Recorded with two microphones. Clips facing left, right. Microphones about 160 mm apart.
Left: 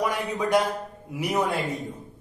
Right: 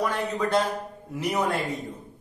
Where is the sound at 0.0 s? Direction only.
10° left (ahead or behind).